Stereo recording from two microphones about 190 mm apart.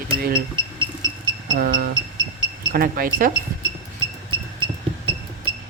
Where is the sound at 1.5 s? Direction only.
50° right (ahead or behind).